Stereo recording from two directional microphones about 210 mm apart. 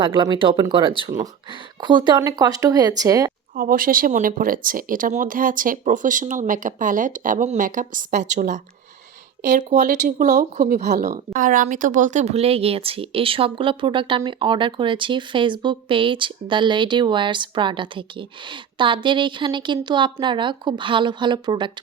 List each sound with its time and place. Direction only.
0.0 s speech: 20° right (ahead or behind)
3.5 s speech: 40° right (ahead or behind); by 21.7 s 20° right (ahead or behind)